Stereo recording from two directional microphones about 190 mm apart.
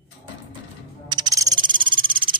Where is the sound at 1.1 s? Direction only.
20° right (ahead or behind).